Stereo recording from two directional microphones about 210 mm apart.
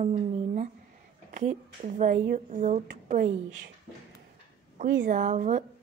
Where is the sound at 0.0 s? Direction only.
35° right (ahead or behind).